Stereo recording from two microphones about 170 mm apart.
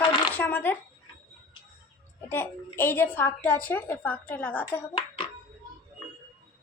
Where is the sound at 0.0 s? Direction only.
30° left (ahead or behind).